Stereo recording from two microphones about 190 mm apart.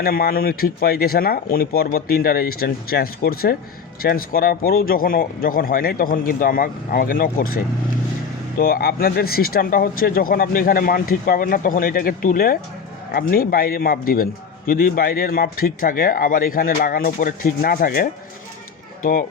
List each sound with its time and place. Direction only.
0.0 s speech: 50° left (ahead or behind)